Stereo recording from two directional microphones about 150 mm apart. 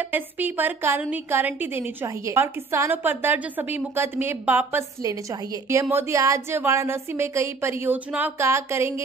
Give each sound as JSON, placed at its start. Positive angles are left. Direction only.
{"t": 0.0, "sound": "a woman's voice", "side_deg": -10}